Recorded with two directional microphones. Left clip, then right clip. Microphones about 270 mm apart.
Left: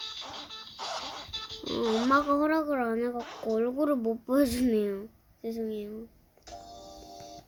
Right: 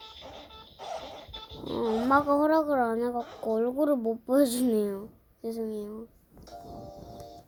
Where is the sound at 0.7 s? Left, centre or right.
Centre.